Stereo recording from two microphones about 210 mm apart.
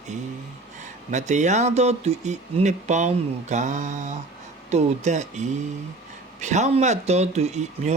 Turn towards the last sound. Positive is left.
turn(degrees=-30)  # may be behind; listen again after turning